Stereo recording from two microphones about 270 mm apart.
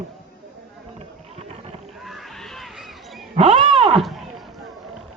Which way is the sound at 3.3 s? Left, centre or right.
Right.